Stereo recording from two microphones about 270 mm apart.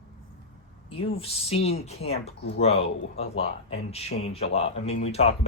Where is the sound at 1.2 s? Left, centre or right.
Left.